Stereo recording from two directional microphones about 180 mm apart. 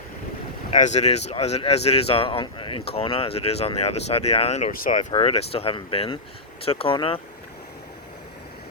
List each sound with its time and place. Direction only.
0.7 s speech: 40° left (ahead or behind)
5.1 s speech: 35° left (ahead or behind)